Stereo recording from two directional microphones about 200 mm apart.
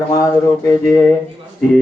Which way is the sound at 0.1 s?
15° left (ahead or behind).